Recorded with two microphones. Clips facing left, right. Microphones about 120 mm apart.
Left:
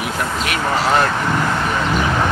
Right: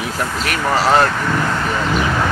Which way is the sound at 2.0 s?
15° left (ahead or behind).